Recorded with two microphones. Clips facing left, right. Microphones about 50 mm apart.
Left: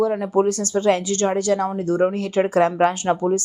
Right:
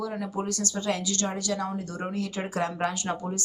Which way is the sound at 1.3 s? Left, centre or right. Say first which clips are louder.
Left 10 dB; left.